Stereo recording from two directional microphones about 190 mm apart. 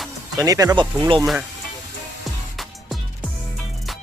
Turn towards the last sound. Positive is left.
turn(degrees=0)  # may be behind; listen again after turning